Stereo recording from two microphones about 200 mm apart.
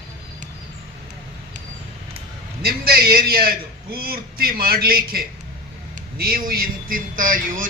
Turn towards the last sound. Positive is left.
turn(degrees=-45)  # may be behind; listen again after turning